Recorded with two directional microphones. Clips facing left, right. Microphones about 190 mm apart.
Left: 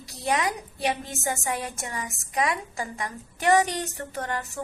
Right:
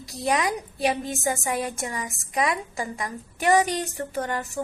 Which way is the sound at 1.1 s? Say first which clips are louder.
Right 4 dB; 15° right (ahead or behind).